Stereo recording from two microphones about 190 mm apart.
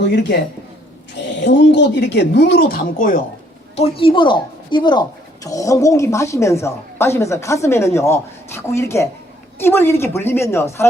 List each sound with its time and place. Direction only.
0.0 s speech: 65° left (ahead or behind); by 3.2 s 45° left (ahead or behind)
3.8 s speech: 30° left (ahead or behind); by 10.8 s 15° left (ahead or behind)